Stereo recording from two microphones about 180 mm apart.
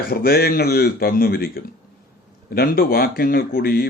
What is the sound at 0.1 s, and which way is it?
A man's voice, 60° left (ahead or behind).